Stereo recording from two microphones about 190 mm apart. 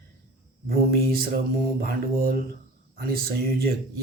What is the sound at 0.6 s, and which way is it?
Speech, 50° right (ahead or behind).